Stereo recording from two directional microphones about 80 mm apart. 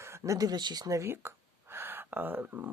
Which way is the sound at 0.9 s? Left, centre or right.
Right.